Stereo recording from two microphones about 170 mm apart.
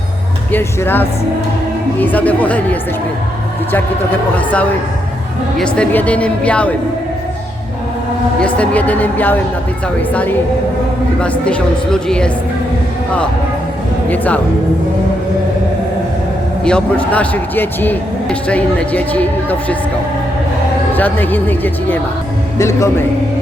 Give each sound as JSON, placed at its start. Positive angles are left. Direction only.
{"t": 0.5, "sound": "a man's voice", "side_deg": 10}
{"t": 3.7, "sound": "a man's voice", "side_deg": 10}
{"t": 8.4, "sound": "a man's voice", "side_deg": 5}
{"t": 14.1, "sound": "a man's voice", "side_deg": 10}
{"t": 16.6, "sound": "a man's voice", "side_deg": 5}
{"t": 20.9, "sound": "a man's voice", "side_deg": 10}